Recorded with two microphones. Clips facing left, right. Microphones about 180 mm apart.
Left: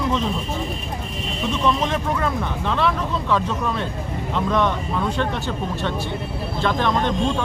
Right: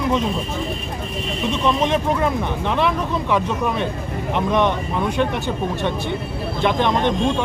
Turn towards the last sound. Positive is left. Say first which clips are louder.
# right 2 dB
turn(degrees=-20)  # may be behind; listen again after turning